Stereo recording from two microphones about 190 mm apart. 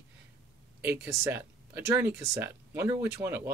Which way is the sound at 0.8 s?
10° right (ahead or behind).